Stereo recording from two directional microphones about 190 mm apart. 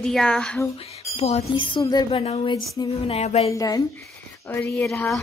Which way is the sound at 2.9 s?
35° left (ahead or behind).